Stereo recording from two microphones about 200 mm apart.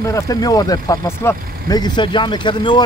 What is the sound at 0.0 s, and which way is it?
Speech, 15° left (ahead or behind).